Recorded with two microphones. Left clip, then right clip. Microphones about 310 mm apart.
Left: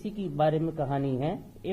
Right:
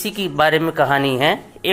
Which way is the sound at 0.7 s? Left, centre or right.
Right.